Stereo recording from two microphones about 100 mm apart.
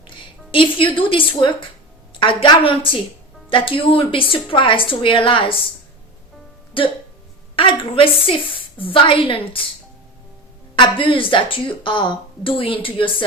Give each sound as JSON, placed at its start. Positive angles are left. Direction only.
{"t": 0.5, "sound": "a woman's voice", "side_deg": 60}
{"t": 6.8, "sound": "a woman's voice", "side_deg": 65}
{"t": 10.8, "sound": "a woman's voice", "side_deg": 55}